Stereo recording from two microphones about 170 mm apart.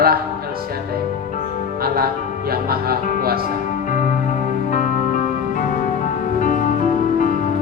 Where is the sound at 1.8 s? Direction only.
60° right (ahead or behind).